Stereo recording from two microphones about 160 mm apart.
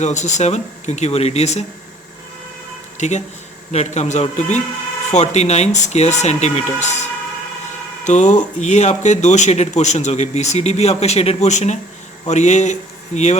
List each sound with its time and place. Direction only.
0.0 s speech: 50° left (ahead or behind)
3.0 s speech: 45° left (ahead or behind)
8.0 s speech: 50° left (ahead or behind)